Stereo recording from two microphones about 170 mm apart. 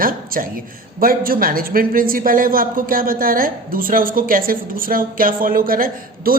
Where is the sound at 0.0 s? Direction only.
55° right (ahead or behind).